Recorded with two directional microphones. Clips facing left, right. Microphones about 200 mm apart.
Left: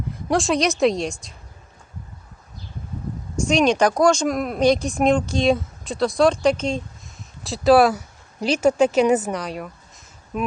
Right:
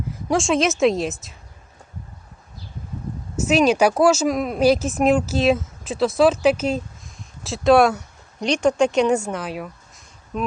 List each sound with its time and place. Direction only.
0.3 s speech: centre (ahead or behind)
3.3 s speech: 5° right (ahead or behind)